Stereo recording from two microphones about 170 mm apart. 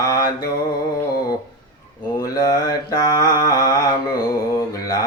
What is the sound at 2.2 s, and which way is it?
Mantra, 25° left (ahead or behind).